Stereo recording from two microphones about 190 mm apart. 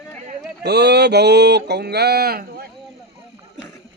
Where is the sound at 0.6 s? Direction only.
60° right (ahead or behind).